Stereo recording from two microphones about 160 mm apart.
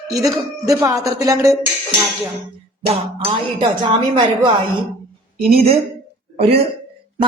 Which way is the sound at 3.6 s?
30° right (ahead or behind).